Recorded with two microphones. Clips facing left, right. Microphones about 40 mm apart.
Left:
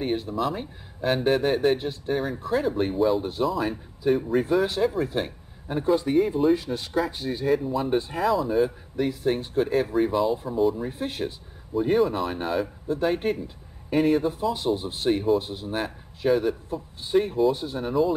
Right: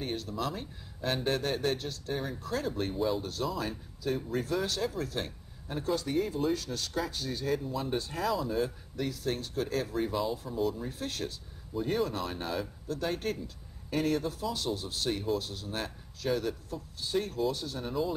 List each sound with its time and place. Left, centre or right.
0.0 s speech: left
10.8 s speech: left